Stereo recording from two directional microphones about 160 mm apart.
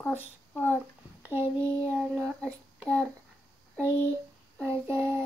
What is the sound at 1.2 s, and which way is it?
Child singing, 15° right (ahead or behind).